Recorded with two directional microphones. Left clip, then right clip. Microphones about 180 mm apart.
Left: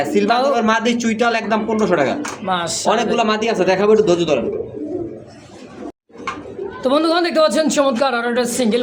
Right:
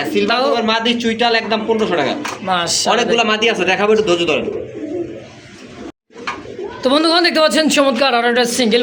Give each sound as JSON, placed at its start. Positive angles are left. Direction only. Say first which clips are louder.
{"t": 0.3, "sound": "speech", "louder": "even", "side_deg": 5}
{"t": 0.6, "sound": "a man's voice", "louder": "right 1 dB", "side_deg": 65}
{"t": 2.5, "sound": "a man's voice", "louder": "right 3 dB", "side_deg": -5}
{"t": 3.2, "sound": "a man's voice", "louder": "right 2 dB", "side_deg": 40}
{"t": 6.8, "sound": "a man's voice", "louder": "right 3 dB", "side_deg": -5}